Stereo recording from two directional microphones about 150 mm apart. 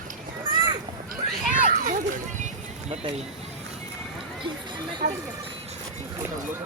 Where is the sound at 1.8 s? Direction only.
60° right (ahead or behind).